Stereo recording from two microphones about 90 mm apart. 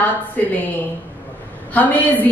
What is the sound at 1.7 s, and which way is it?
Speech, 15° left (ahead or behind).